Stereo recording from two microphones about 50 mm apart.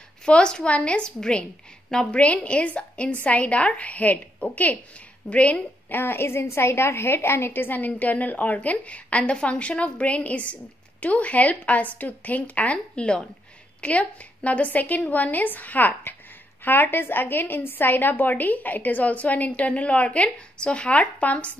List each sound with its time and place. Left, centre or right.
0.2 s a woman's voice: centre
5.9 s a woman's voice: left